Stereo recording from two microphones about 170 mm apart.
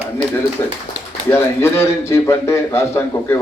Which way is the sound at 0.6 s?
15° left (ahead or behind).